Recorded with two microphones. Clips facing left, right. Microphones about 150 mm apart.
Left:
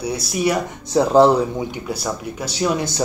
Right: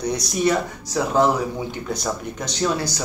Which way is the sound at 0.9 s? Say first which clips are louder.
Left 6 dB; 35° left (ahead or behind).